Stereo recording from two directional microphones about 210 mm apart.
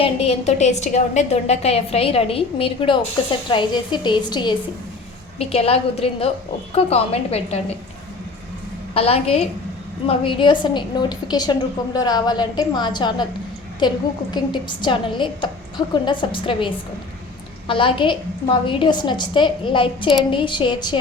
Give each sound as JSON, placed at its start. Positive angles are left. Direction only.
{"t": 0.0, "sound": "a woman's voice", "side_deg": 30}
{"t": 9.0, "sound": "a woman's voice", "side_deg": 30}